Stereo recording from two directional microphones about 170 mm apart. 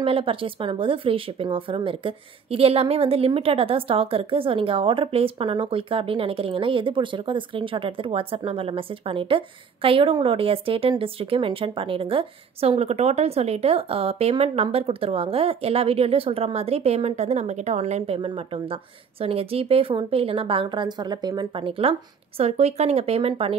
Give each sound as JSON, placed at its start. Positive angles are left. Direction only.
{"t": 0.0, "sound": "speech", "side_deg": -30}